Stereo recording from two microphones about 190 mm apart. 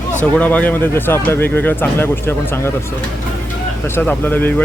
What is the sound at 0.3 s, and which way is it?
Speech, 10° left (ahead or behind).